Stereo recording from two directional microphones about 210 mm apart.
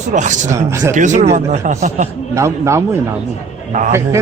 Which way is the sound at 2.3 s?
15° right (ahead or behind).